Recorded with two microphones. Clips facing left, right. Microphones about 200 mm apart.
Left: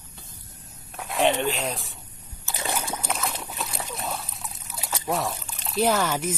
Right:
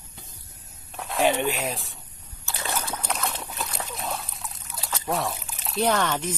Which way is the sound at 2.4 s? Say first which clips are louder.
Left 1 dB; 15° left (ahead or behind).